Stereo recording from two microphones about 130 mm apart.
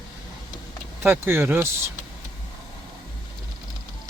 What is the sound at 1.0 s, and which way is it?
Speech, 15° right (ahead or behind).